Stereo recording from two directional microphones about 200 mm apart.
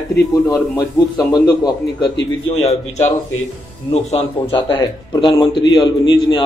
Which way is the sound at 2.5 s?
35° left (ahead or behind).